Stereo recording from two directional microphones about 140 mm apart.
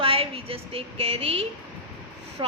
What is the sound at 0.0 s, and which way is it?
A woman's voice, 40° right (ahead or behind).